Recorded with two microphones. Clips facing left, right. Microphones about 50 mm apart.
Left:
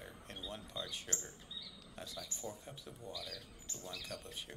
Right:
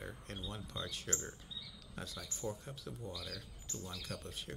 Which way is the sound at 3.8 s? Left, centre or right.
Centre.